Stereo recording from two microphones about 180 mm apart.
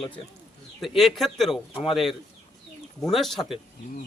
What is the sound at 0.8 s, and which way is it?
A man's voice, centre (ahead or behind).